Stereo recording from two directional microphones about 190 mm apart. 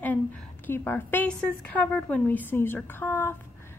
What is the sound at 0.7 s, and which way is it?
A woman's voice, 10° left (ahead or behind).